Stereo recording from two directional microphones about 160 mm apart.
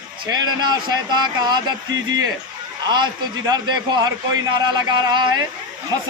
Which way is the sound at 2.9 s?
25° right (ahead or behind).